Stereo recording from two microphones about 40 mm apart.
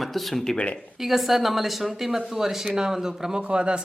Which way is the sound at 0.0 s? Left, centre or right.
Centre.